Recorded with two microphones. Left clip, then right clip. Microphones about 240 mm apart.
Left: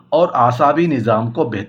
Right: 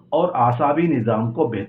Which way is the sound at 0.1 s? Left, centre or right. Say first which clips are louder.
Left 5 dB; left.